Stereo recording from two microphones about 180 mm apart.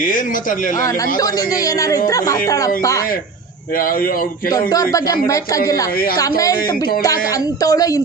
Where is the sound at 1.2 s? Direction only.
20° left (ahead or behind).